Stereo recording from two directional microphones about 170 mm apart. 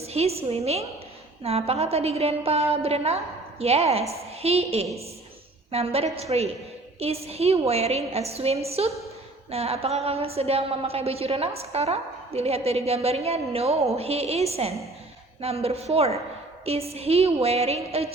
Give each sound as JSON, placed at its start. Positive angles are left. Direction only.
{"t": 0.0, "sound": "a woman's voice", "side_deg": -35}